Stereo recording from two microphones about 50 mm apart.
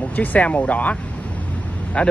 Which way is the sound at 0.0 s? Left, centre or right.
Left.